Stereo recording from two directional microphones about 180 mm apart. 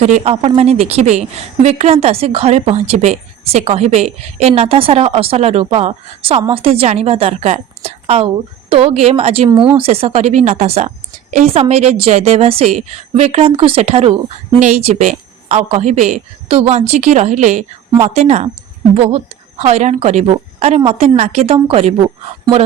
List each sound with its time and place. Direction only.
0.0 s a woman's voice: 35° right (ahead or behind)